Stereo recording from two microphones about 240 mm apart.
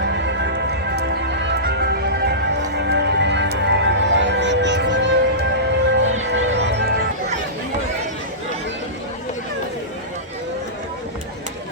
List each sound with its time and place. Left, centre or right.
0.0 s music: right